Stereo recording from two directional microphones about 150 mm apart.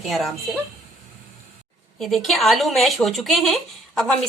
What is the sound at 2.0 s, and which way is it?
A woman's voice, centre (ahead or behind).